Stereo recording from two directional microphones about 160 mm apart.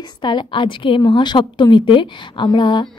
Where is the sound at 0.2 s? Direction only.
30° left (ahead or behind).